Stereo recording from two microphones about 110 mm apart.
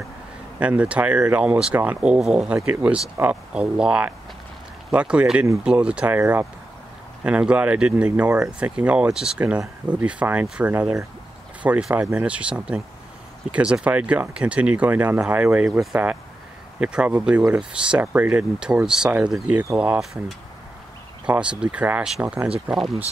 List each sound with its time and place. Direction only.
0.6 s speech: 10° right (ahead or behind)
19.5 s speech: 20° right (ahead or behind)
19.8 s speech: 5° right (ahead or behind)